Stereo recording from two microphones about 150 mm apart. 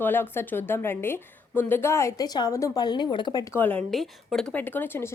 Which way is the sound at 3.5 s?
10° left (ahead or behind).